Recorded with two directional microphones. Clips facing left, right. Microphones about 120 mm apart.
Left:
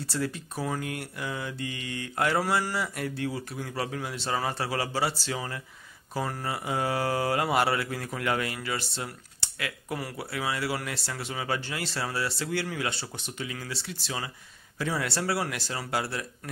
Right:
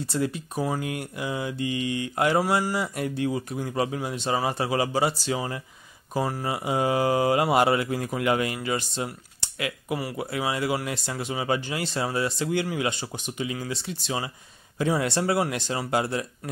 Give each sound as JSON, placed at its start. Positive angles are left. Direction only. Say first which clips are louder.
{"t": 0.0, "sound": "speech", "louder": "right 4 dB", "side_deg": -15}